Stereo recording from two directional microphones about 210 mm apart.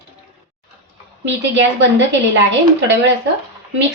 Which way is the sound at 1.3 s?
60° right (ahead or behind).